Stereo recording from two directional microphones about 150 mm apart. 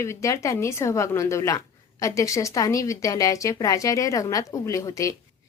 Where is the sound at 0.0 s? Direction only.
20° left (ahead or behind).